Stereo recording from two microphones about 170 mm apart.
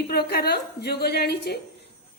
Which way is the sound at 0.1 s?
65° left (ahead or behind).